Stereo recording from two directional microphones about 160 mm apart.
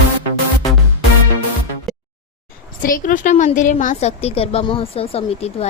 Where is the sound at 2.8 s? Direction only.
60° left (ahead or behind).